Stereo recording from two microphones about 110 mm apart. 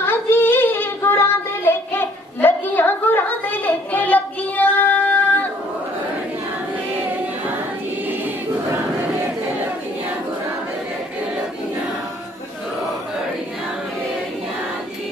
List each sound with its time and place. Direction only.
0.0 s child singing: 20° left (ahead or behind)